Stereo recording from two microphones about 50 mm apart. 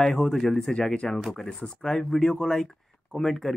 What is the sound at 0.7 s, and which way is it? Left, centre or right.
Speech, centre.